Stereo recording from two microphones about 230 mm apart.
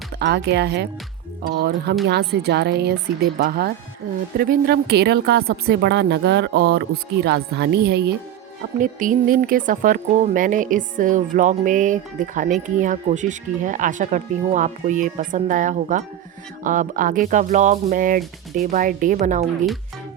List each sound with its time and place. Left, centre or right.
0.2 s a woman's voice: right
8.8 s speech: right